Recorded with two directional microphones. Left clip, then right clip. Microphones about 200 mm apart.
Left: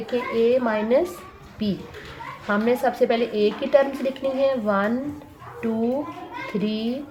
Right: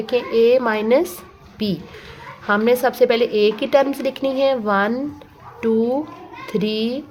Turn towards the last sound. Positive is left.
turn(degrees=-50)  # may be behind; listen again after turning